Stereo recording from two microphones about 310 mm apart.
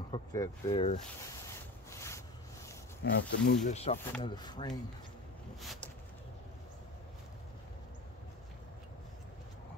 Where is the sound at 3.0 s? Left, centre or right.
Left; by 4.7 s centre.